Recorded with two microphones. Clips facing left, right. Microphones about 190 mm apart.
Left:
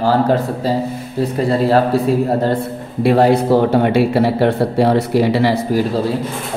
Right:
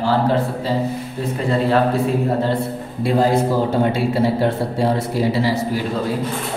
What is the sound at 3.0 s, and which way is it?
Speech, 70° left (ahead or behind).